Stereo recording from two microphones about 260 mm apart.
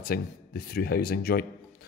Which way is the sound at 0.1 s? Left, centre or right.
Left.